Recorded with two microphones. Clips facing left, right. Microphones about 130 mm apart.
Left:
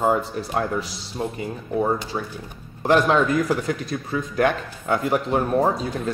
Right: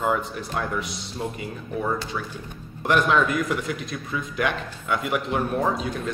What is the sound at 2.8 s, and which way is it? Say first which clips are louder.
Speech: left 3 dB; 30° left (ahead or behind).